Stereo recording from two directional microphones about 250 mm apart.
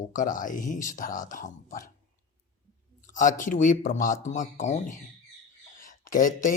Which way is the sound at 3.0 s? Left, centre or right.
Left.